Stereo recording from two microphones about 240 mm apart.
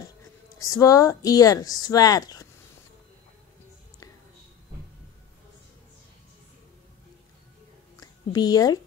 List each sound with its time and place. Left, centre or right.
0.6 s speech: centre
8.0 s a woman's voice: centre